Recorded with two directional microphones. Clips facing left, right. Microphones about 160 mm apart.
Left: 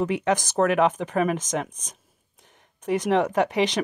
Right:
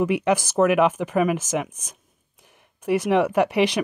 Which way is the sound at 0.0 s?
10° right (ahead or behind).